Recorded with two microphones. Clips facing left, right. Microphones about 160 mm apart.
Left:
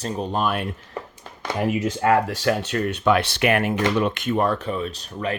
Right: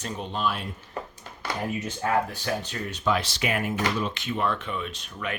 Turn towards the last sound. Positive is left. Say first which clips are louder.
# left 6 dB
turn(degrees=35)  # may be behind; listen again after turning